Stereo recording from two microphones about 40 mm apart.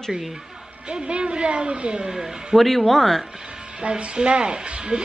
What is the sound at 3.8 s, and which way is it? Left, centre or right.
Speech, right.